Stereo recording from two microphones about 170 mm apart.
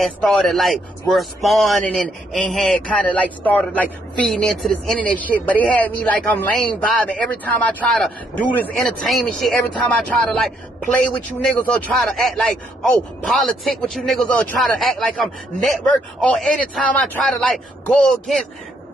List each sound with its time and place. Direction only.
0.0 s a man's voice: centre (ahead or behind)